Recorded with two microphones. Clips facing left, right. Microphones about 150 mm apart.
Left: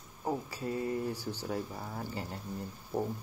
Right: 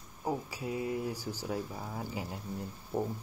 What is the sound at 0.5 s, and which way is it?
Mantra, 10° right (ahead or behind).